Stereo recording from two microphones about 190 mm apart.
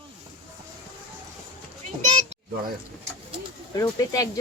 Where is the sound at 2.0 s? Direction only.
40° right (ahead or behind).